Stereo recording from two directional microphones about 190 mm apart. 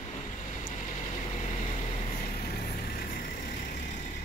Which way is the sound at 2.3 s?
50° left (ahead or behind).